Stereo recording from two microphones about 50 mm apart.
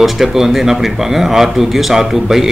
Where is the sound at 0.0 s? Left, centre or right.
Centre.